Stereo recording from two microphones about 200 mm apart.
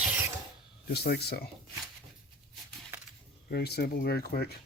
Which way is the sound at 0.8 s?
55° left (ahead or behind).